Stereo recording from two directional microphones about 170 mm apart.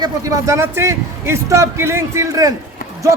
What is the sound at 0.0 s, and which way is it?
A man's voice, 20° right (ahead or behind).